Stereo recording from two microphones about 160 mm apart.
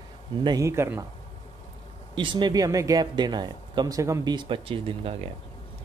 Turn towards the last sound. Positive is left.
turn(degrees=-35)  # may be behind; listen again after turning